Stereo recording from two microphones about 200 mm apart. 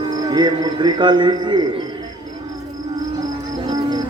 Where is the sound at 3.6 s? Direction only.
20° right (ahead or behind).